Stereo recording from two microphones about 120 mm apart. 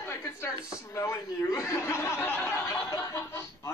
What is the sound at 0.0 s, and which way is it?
Speech, 25° left (ahead or behind).